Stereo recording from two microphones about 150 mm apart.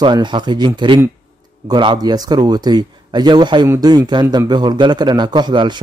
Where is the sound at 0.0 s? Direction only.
30° right (ahead or behind).